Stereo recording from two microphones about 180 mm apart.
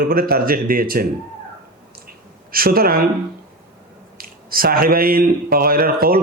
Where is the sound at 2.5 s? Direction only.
55° right (ahead or behind).